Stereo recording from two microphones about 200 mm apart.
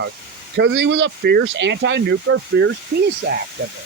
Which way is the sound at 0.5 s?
60° right (ahead or behind).